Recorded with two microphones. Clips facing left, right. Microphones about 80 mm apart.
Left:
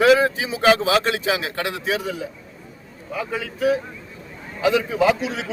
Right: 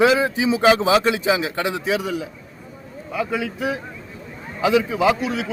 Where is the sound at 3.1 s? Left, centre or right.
Centre.